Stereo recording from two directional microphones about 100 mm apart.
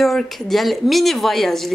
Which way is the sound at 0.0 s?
Centre (ahead or behind).